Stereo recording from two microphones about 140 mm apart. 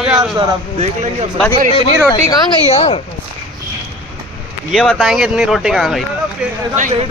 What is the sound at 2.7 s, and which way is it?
Speech, 50° left (ahead or behind).